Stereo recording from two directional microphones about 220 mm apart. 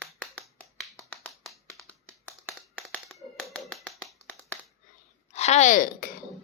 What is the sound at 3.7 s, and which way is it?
Finger snapping, centre (ahead or behind).